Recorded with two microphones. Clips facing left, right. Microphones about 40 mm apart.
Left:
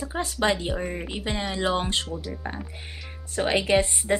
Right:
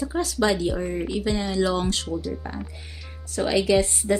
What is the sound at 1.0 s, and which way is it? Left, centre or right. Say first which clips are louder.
Speech: right 4 dB; left.